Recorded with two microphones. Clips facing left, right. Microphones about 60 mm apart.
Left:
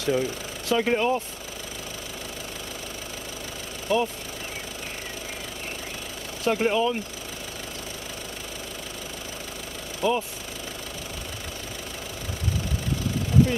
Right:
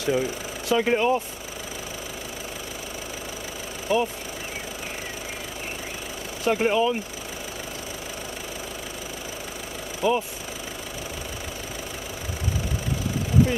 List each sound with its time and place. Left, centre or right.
0.0 s speech: centre
3.9 s speech: centre
6.4 s speech: centre
10.0 s speech: centre